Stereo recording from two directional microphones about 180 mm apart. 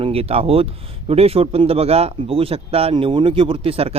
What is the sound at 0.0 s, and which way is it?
A man's voice, 30° right (ahead or behind).